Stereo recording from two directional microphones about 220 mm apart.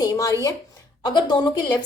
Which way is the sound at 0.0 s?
15° left (ahead or behind).